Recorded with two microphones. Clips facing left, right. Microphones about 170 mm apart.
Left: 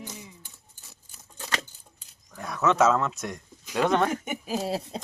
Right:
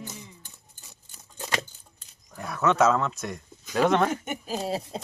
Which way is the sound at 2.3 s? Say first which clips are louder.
Even; centre (ahead or behind).